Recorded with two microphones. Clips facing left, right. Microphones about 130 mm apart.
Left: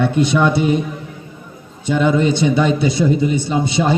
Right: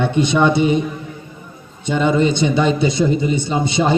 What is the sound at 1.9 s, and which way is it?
A man's voice, 5° left (ahead or behind).